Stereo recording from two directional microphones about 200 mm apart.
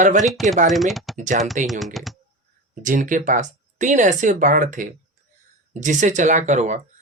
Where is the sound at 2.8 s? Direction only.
40° right (ahead or behind).